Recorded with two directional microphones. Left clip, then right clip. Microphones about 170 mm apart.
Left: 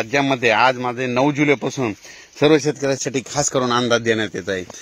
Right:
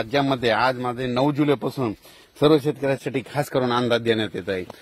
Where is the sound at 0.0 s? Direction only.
35° left (ahead or behind).